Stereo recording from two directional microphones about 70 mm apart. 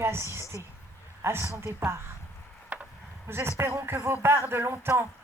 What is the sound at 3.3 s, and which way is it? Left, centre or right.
Speech, right.